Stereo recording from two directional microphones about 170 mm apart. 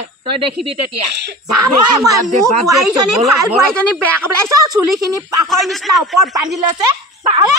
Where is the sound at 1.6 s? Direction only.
20° right (ahead or behind).